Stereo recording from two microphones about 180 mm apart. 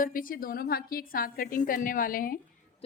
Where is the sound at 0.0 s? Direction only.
50° left (ahead or behind).